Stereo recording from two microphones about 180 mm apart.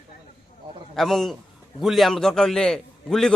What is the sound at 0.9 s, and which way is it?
Speech, centre (ahead or behind).